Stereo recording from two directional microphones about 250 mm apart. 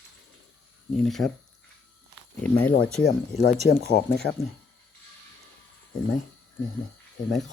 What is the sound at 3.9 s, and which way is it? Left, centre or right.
Speech, left.